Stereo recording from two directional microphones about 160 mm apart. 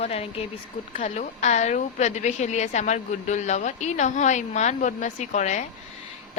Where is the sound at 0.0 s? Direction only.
40° left (ahead or behind).